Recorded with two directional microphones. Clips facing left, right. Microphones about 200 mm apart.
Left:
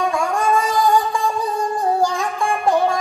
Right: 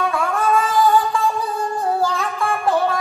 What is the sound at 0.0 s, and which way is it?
Music, 15° left (ahead or behind).